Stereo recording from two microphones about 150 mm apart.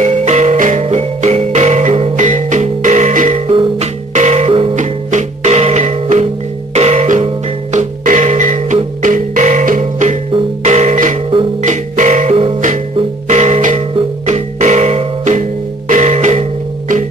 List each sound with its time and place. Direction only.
0.0 s music: 50° right (ahead or behind)
3.4 s music: 45° right (ahead or behind)
4.7 s music: 50° right (ahead or behind)